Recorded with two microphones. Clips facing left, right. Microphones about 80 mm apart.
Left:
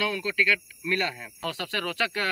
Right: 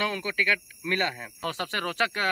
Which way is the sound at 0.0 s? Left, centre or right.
Right.